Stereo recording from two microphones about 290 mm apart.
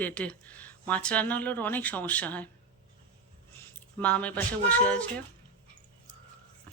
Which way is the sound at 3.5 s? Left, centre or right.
Centre.